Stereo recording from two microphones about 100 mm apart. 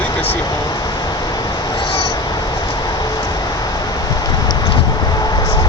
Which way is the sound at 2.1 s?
40° left (ahead or behind).